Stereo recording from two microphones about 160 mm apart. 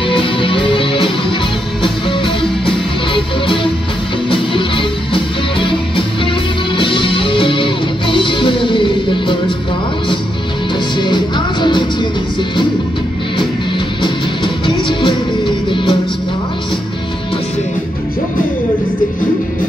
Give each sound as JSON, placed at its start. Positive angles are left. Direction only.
{"t": 0.1, "sound": "music", "side_deg": 30}
{"t": 11.0, "sound": "music", "side_deg": 30}
{"t": 14.0, "sound": "music", "side_deg": 30}